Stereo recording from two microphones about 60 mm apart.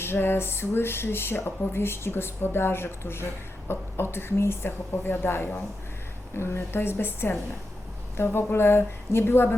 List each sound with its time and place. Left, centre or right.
0.0 s speech: left